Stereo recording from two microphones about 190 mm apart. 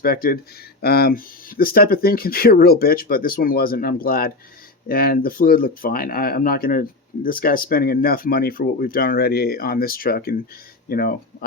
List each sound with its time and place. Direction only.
0.0 s speech: 50° left (ahead or behind)